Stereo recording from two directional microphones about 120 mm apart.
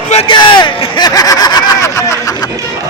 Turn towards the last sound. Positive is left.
turn(degrees=25)  # may be behind; listen again after turning